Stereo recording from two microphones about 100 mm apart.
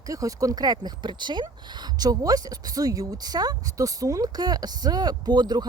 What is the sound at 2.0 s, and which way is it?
A woman's voice, 40° right (ahead or behind).